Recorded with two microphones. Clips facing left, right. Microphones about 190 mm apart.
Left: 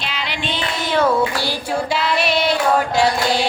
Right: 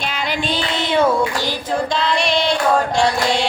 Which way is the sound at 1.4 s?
10° left (ahead or behind).